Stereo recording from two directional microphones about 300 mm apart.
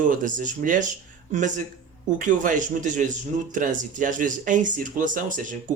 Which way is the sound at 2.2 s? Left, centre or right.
Right.